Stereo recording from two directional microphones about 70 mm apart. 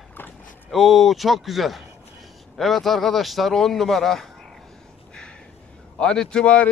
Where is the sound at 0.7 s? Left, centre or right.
Centre.